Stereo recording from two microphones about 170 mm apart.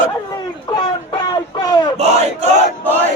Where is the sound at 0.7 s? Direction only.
30° left (ahead or behind).